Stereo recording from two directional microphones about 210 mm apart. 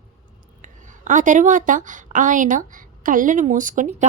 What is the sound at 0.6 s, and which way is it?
A woman's voice, 35° right (ahead or behind).